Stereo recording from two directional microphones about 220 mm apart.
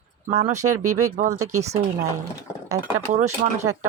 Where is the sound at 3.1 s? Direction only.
35° right (ahead or behind).